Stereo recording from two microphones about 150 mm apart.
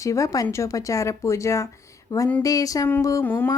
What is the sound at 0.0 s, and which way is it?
Speech, 20° left (ahead or behind).